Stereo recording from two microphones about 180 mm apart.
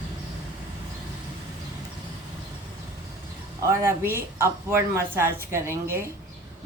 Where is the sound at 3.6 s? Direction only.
15° right (ahead or behind).